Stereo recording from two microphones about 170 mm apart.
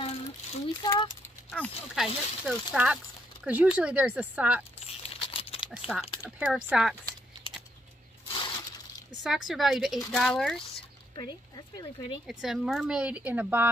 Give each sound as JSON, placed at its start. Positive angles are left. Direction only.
{"t": 0.0, "sound": "a sound", "side_deg": 35}
{"t": 0.8, "sound": "speech", "side_deg": 25}
{"t": 1.5, "sound": "speech", "side_deg": 10}
{"t": 2.0, "sound": "speech", "side_deg": -5}
{"t": 4.7, "sound": "crumpling", "side_deg": 35}
{"t": 5.6, "sound": "speech", "side_deg": -5}
{"t": 8.3, "sound": "a sound", "side_deg": 30}
{"t": 9.2, "sound": "speech", "side_deg": 0}
{"t": 12.3, "sound": "speech", "side_deg": 0}